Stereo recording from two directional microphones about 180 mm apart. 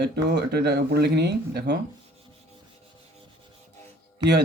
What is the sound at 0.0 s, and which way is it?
Speech, 65° right (ahead or behind).